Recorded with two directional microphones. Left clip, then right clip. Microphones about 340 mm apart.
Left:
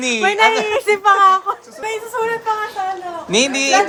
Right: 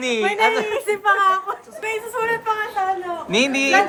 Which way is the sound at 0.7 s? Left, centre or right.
Left.